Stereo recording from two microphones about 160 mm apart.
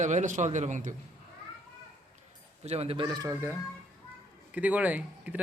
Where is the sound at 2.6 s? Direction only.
40° right (ahead or behind).